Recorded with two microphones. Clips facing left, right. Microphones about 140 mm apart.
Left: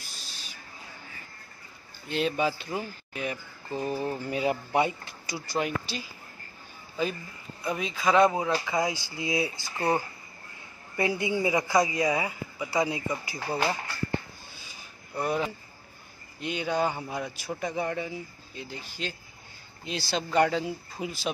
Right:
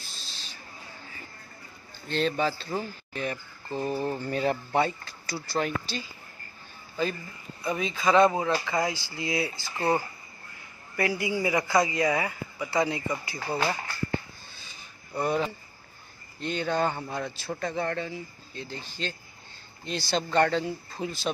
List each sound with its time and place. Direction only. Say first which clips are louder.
0.0 s owl: even; 10° left (ahead or behind)
2.0 s speech: even; 10° left (ahead or behind)
7.6 s speech: right 1 dB; 5° left (ahead or behind)
8.5 s speech: even; 15° left (ahead or behind)
15.1 s speech: right 1 dB; 5° left (ahead or behind)